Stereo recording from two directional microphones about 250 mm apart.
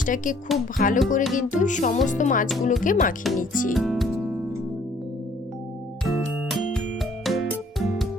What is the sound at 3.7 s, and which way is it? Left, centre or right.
Music, centre.